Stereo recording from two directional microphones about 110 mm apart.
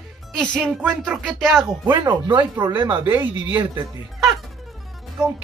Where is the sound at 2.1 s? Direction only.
45° right (ahead or behind).